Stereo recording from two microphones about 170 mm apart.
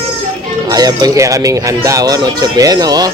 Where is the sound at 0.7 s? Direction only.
20° right (ahead or behind).